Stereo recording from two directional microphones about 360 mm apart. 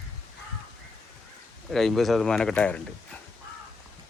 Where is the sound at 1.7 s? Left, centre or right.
Centre.